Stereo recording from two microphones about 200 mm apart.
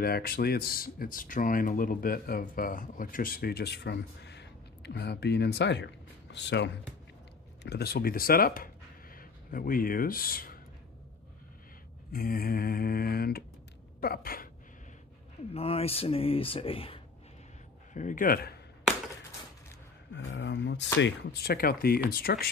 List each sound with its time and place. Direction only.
0.0 s speech: 50° left (ahead or behind)
12.1 s speech: 45° left (ahead or behind)
14.0 s a sound: 50° left (ahead or behind)
15.5 s speech: 30° left (ahead or behind)
17.9 s speech: 40° left (ahead or behind)
20.2 s speech: 65° left (ahead or behind)